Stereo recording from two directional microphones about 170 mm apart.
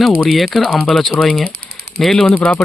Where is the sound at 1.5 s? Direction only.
60° right (ahead or behind).